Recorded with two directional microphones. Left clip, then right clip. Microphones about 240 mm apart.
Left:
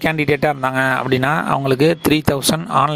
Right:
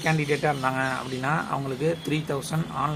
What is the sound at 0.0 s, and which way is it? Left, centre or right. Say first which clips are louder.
Speech: left 8 dB; left.